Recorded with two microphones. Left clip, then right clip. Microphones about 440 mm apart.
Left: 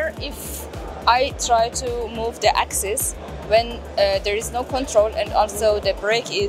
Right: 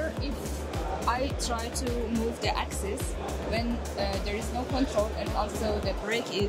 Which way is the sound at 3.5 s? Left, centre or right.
Left.